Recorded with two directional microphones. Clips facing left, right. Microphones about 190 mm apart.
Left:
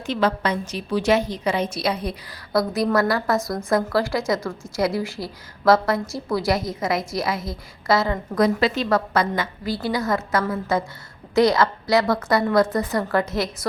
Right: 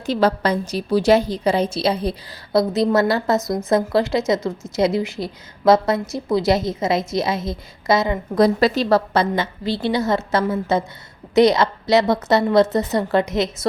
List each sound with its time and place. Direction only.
0.0 s a woman's voice: 35° right (ahead or behind); by 8.2 s 20° right (ahead or behind)
8.4 s a woman's voice: 35° right (ahead or behind)